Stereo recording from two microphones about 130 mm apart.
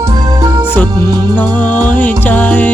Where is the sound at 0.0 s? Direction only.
30° right (ahead or behind).